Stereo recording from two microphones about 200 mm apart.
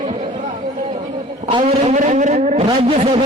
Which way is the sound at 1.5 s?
25° right (ahead or behind).